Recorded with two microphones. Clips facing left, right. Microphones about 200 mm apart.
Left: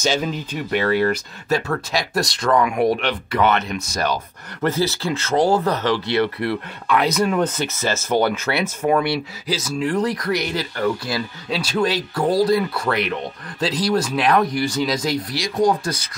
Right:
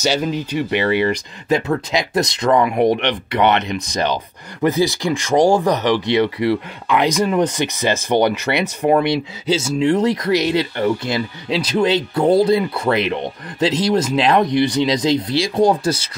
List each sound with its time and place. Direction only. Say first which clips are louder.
0.0 s speech: right 3 dB; 5° right (ahead or behind)
0.7 s speech: even; 15° right (ahead or behind)